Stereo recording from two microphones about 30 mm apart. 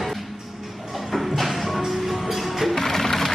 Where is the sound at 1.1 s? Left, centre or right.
Centre.